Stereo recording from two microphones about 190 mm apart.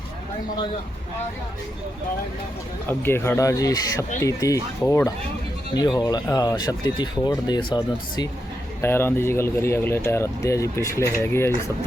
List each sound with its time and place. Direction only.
3.0 s speech: 10° left (ahead or behind)